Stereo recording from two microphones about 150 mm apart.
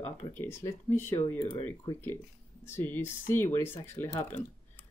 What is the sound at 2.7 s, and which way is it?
Speech, 15° left (ahead or behind).